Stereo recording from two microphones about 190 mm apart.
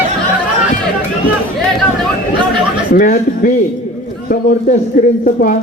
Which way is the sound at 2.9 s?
45° left (ahead or behind).